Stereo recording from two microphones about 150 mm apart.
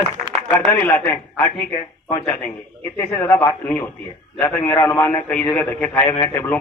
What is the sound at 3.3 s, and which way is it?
Speech, 15° left (ahead or behind).